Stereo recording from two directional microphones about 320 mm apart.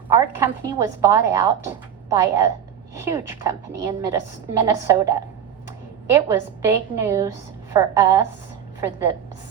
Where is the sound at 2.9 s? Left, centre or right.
Centre.